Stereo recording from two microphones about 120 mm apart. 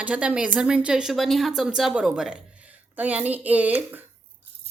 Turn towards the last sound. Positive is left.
turn(degrees=-15)  # may be behind; listen again after turning